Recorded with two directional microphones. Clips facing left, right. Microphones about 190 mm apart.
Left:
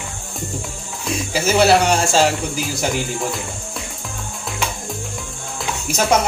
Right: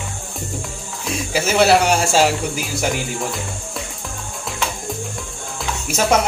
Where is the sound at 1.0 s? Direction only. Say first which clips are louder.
Left 1 dB; centre (ahead or behind).